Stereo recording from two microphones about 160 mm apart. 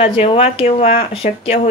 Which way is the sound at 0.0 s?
40° left (ahead or behind).